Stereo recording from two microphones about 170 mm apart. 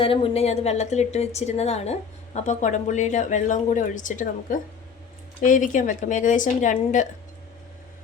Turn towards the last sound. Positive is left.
turn(degrees=45)  # may be behind; listen again after turning